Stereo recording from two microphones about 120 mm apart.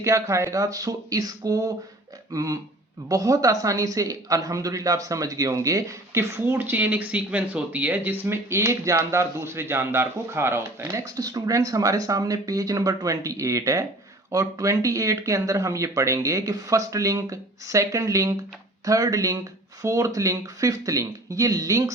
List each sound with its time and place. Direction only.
0.0 s speech: 25° right (ahead or behind)